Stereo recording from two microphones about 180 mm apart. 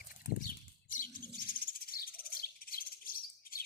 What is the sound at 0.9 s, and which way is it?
Bird, 50° left (ahead or behind).